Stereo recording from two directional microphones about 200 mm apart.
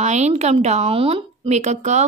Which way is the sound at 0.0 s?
35° right (ahead or behind).